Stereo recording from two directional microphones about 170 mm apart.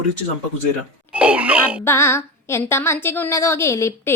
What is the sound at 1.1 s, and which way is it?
Speech, 5° right (ahead or behind).